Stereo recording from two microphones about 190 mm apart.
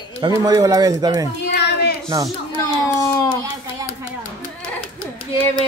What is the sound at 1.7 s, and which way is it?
Child singing, 60° left (ahead or behind).